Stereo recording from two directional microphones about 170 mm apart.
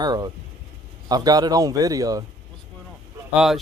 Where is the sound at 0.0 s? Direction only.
25° right (ahead or behind).